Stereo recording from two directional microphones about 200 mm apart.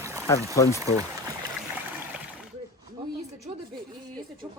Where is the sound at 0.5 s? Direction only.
15° left (ahead or behind).